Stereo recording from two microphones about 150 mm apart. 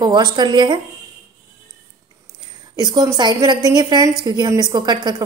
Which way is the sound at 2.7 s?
30° right (ahead or behind).